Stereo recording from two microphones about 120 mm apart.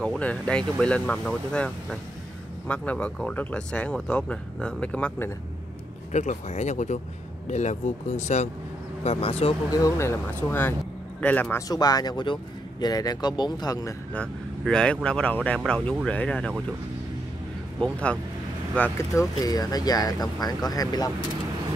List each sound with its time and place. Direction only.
0.0 s speech: 10° left (ahead or behind)
6.1 s speech: 70° left (ahead or behind)
9.0 s speech: 55° left (ahead or behind)
9.7 s speech: 30° left (ahead or behind)
11.7 s speech: 35° left (ahead or behind)
14.6 s speech: 5° left (ahead or behind)
17.7 s speech: 5° left (ahead or behind)
18.9 s speech: 30° left (ahead or behind)